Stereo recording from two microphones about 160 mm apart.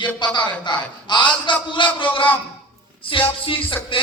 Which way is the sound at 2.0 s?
30° left (ahead or behind).